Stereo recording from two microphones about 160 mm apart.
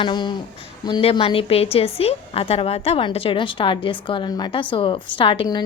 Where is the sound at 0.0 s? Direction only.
30° left (ahead or behind).